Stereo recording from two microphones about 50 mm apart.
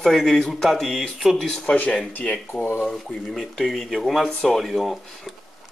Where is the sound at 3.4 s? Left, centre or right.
Centre.